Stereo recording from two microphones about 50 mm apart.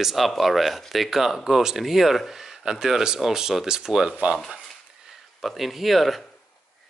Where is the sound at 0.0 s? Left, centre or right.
Centre.